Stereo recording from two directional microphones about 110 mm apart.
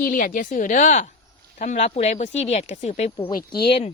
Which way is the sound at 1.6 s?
90° left.